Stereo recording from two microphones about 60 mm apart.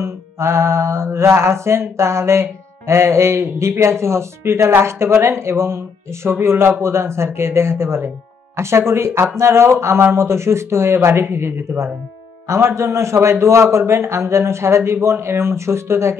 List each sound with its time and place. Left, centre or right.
0.0 s mantra: right
12.4 s mantra: right